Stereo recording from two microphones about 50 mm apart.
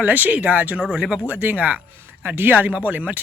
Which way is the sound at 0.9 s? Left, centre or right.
Centre.